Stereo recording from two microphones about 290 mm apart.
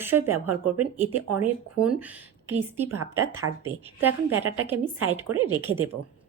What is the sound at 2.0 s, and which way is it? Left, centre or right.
Speech, centre.